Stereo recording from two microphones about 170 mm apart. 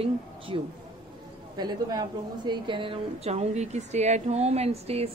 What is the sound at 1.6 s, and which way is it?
A woman's voice, 25° right (ahead or behind).